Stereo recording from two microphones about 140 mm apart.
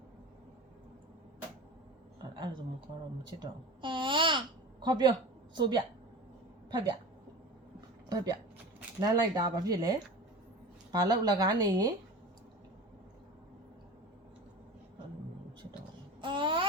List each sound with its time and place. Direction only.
2.4 s a woman's voice: 35° right (ahead or behind)
3.2 s babbling: 35° right (ahead or behind)
5.5 s a woman's voice: 30° right (ahead or behind)
8.1 s speech: 30° right (ahead or behind)
10.9 s speech: 30° right (ahead or behind)
16.2 s babbling: 35° right (ahead or behind)